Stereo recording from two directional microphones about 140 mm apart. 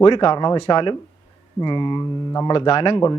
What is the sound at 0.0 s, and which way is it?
Speech, 35° left (ahead or behind).